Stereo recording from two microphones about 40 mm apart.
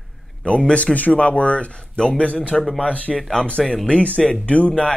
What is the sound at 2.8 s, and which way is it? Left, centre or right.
Speech, left.